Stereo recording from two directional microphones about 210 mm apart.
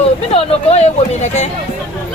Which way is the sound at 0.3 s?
30° left (ahead or behind).